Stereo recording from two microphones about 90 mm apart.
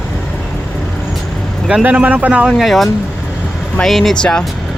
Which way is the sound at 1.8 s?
20° right (ahead or behind).